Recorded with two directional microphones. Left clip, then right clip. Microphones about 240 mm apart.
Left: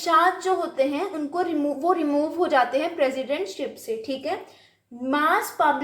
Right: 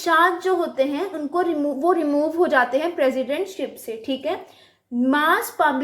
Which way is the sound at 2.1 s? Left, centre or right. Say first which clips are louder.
Right 3 dB; right.